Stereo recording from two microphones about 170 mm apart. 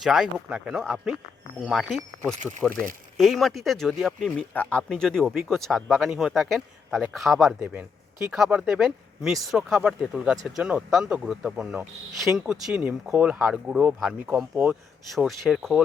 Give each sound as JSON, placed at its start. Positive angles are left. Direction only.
{"t": 0.0, "sound": "speech", "side_deg": 0}
{"t": 2.3, "sound": "speech", "side_deg": -45}
{"t": 3.2, "sound": "speech", "side_deg": 0}